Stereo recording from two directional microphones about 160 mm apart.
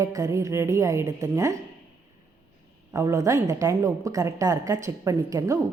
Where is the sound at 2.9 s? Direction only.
20° right (ahead or behind).